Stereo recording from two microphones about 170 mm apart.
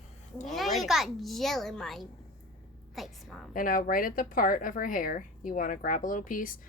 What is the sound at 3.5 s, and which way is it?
Speech, 55° left (ahead or behind).